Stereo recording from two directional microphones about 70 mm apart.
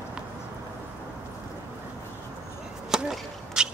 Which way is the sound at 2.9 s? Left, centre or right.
Centre.